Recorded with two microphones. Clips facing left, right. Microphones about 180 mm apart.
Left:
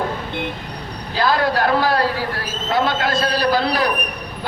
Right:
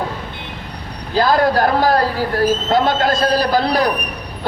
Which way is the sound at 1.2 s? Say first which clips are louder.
Right 4 dB; 45° right (ahead or behind).